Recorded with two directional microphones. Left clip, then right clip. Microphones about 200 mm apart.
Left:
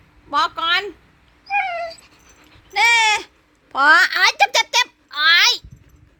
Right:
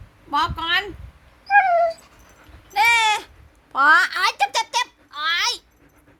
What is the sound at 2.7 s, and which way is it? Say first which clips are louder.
Babbling: left 2 dB; 15° left (ahead or behind).